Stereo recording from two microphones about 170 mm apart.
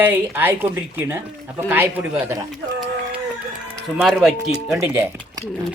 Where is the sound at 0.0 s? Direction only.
10° right (ahead or behind).